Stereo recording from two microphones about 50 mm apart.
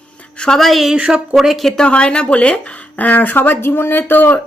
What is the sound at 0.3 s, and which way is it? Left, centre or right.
Speech, centre.